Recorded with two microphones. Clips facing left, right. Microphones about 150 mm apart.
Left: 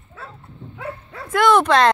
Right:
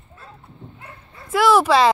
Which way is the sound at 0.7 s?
90° left.